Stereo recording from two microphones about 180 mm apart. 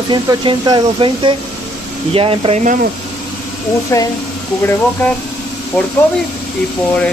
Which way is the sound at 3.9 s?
15° left (ahead or behind).